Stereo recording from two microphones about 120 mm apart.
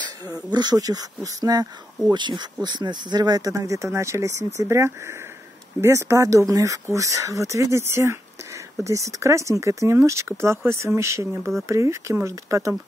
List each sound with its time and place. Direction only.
0.0 s speech: 35° right (ahead or behind)